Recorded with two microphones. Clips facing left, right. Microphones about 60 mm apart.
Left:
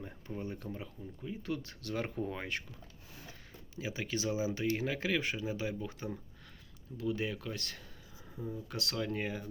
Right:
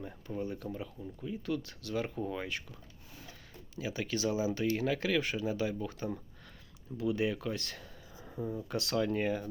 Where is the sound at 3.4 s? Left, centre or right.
Left.